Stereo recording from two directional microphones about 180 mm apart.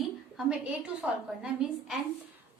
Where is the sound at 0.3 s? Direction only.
5° right (ahead or behind).